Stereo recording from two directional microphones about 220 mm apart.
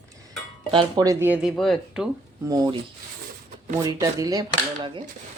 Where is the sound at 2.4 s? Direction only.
15° right (ahead or behind).